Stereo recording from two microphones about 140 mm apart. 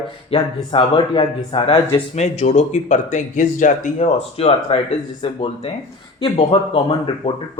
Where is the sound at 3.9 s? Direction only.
45° left (ahead or behind).